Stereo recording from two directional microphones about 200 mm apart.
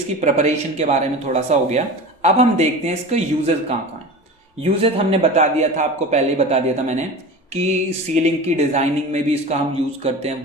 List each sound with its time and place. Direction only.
0.2 s a man's voice: 35° right (ahead or behind)